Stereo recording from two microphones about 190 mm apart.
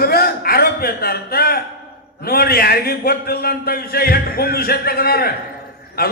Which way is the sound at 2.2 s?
55° left (ahead or behind).